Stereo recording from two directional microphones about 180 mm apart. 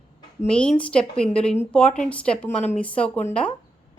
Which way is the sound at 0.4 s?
5° left (ahead or behind).